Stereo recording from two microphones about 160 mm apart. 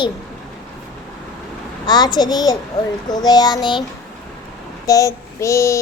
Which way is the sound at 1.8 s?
25° left (ahead or behind).